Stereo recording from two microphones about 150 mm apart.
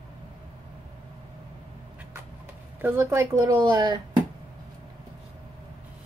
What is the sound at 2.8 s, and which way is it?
Speech, 15° right (ahead or behind).